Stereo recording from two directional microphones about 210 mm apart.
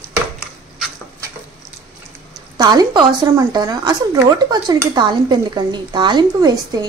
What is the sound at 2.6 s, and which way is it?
Speech, 20° right (ahead or behind).